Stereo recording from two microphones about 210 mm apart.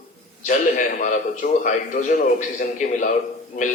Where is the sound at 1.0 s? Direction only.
35° left (ahead or behind).